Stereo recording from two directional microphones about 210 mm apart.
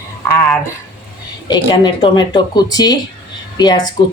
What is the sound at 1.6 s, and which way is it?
Speech, 20° left (ahead or behind).